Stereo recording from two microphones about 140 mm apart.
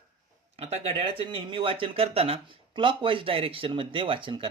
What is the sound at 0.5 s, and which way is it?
Speech, 45° right (ahead or behind).